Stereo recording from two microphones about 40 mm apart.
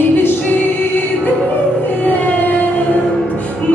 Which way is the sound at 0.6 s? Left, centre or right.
Left.